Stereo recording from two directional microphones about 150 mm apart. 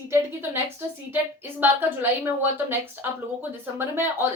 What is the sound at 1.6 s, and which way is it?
A woman's voice, 15° right (ahead or behind).